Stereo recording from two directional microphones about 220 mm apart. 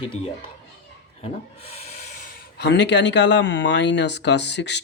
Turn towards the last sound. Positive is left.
turn(degrees=50)  # may be behind; listen again after turning